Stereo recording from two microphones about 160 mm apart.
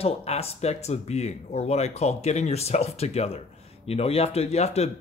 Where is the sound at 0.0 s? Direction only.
40° left (ahead or behind).